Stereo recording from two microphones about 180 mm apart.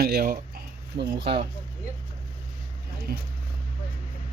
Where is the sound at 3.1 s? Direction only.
55° right (ahead or behind).